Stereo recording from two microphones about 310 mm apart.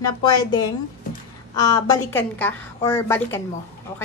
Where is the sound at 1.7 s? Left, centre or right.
Centre.